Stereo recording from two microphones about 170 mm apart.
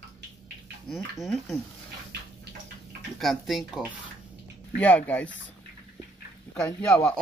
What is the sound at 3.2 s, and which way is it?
Speech, centre (ahead or behind).